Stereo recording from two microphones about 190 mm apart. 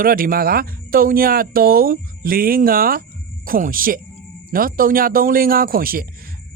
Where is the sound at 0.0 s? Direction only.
50° right (ahead or behind).